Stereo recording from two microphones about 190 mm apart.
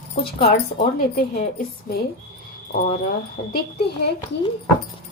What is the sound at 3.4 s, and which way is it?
Speech, 45° left (ahead or behind).